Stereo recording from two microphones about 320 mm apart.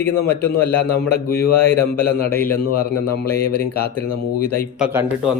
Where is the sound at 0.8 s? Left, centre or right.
Left.